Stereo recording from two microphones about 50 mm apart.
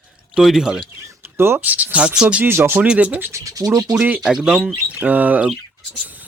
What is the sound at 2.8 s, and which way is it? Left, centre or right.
Speech, right.